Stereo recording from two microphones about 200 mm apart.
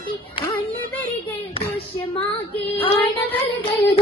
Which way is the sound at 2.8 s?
25° left (ahead or behind).